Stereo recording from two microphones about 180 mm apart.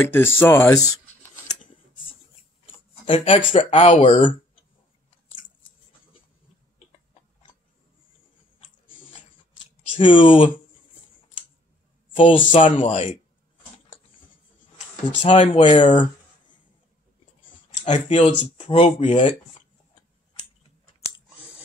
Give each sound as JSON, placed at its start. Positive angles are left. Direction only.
{"t": 0.1, "sound": "speech", "side_deg": 10}
{"t": 3.1, "sound": "speech", "side_deg": 30}
{"t": 9.9, "sound": "speech", "side_deg": 30}
{"t": 12.4, "sound": "speech", "side_deg": 25}
{"t": 12.7, "sound": "speech", "side_deg": 40}
{"t": 15.0, "sound": "speech", "side_deg": 30}
{"t": 17.7, "sound": "speech", "side_deg": 40}